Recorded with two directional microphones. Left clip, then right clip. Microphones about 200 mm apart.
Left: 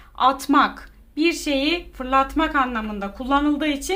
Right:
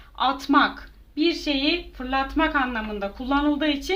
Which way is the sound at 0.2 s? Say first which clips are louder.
Left 3 dB; 20° left (ahead or behind).